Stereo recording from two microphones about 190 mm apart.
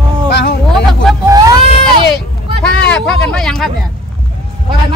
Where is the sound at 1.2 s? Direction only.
20° right (ahead or behind).